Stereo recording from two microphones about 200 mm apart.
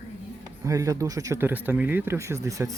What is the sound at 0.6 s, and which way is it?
Speech, 15° right (ahead or behind).